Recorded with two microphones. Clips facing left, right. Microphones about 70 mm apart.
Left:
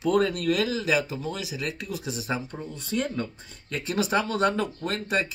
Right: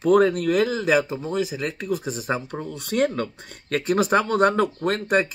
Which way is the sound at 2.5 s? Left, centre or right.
Right.